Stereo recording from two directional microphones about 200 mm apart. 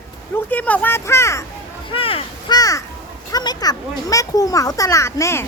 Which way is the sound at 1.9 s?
25° left (ahead or behind).